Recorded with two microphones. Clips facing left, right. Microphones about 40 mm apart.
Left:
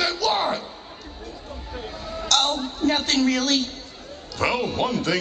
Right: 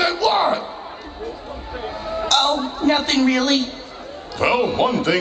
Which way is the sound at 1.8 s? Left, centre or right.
Centre.